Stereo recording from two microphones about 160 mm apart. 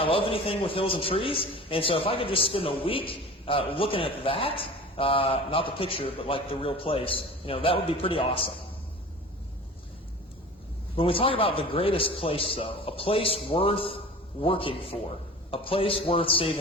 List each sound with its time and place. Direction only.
0.0 s a man's voice: 35° left (ahead or behind)
10.9 s a man's voice: 35° left (ahead or behind)